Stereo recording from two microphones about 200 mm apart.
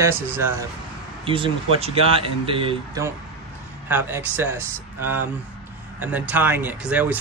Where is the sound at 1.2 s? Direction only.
25° right (ahead or behind).